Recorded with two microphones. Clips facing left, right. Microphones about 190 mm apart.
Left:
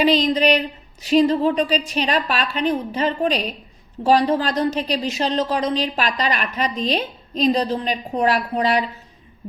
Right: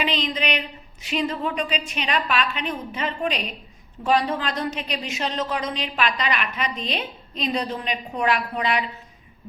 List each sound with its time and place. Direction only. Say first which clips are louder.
0.0 s a woman's voice: left 9 dB; 40° left (ahead or behind)